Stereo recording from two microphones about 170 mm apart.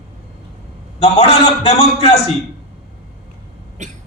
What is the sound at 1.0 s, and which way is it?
A man's voice, 40° left (ahead or behind).